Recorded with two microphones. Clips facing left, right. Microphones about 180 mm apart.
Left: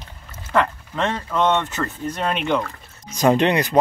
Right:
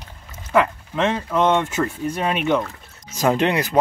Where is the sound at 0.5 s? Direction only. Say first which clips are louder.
Right 2 dB; 5° right (ahead or behind).